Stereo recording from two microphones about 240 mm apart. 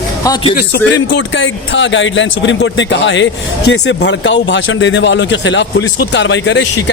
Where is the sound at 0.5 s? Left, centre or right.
Left.